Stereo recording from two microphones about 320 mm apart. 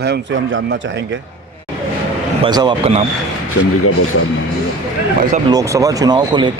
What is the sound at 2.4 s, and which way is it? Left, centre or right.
Speech, centre.